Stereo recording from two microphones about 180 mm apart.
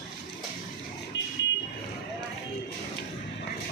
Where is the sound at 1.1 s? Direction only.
85° left.